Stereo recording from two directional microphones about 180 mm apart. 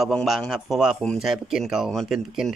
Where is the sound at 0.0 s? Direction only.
Centre (ahead or behind).